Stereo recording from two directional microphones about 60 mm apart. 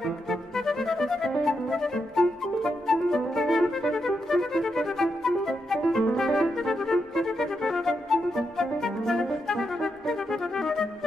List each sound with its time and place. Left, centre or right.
0.0 s music: centre